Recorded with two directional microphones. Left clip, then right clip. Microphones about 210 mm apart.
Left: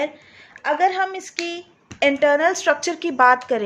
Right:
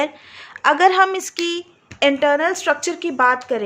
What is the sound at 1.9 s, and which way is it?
Speech, 15° right (ahead or behind).